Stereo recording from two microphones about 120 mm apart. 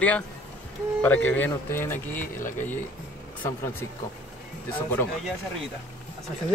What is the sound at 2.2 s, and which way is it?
Speech, 90° left.